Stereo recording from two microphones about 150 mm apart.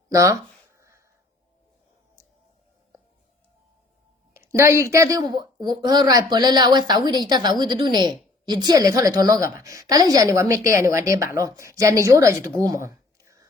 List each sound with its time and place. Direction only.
0.1 s speech: 20° right (ahead or behind)
0.8 s a sound: 20° right (ahead or behind)
4.4 s a woman's voice: 20° right (ahead or behind)